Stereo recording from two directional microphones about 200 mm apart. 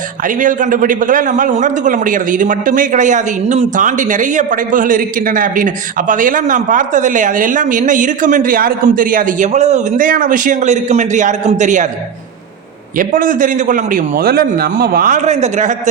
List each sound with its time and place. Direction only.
0.3 s a man's voice: 40° right (ahead or behind)
13.0 s a man's voice: 40° right (ahead or behind)